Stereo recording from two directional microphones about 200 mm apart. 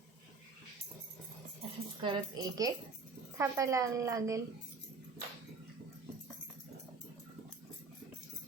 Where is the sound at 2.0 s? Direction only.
25° right (ahead or behind).